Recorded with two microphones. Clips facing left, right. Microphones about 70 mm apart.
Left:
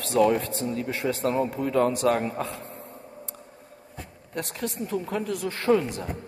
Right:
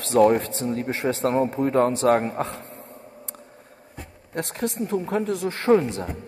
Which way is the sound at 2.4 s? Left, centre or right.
Right.